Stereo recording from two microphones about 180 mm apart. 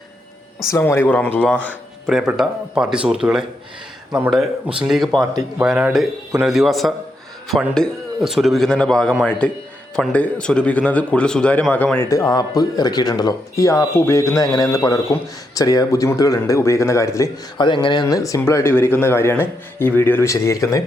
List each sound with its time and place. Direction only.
0.7 s a man's voice: 10° left (ahead or behind)